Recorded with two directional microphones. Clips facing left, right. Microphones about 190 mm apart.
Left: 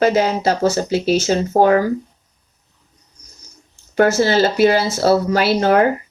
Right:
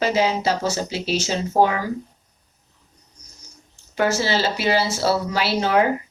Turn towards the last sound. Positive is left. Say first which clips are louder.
# left 5 dB
turn(degrees=50)  # may be behind; listen again after turning